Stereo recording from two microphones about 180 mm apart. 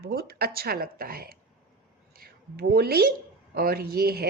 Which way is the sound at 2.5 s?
60° right (ahead or behind).